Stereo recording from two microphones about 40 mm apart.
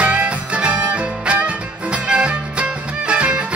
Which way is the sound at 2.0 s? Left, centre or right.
Right.